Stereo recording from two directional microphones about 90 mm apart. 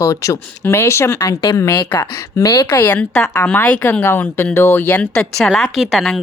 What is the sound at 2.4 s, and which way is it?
Speech, 45° left (ahead or behind).